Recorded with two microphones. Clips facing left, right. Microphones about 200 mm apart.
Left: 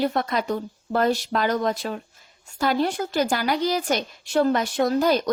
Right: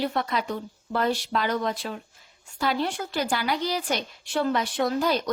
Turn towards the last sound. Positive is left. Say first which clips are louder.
# left 4 dB
turn(degrees=45)  # may be behind; listen again after turning